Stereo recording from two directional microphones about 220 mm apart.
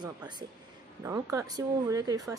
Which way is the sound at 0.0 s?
20° right (ahead or behind).